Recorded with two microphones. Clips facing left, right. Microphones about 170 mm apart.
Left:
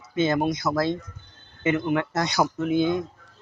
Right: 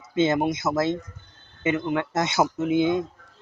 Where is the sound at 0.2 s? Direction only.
25° right (ahead or behind).